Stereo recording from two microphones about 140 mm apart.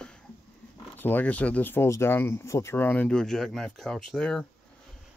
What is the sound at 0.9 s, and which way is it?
Speech, 15° left (ahead or behind).